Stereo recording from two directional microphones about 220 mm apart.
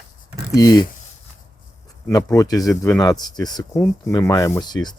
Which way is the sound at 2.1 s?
15° left (ahead or behind).